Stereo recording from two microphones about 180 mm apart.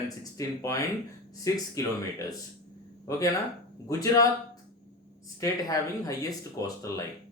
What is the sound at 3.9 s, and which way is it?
Speech, 20° left (ahead or behind).